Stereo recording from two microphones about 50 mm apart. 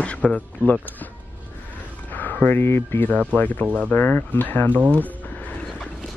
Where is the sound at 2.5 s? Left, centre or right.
Left.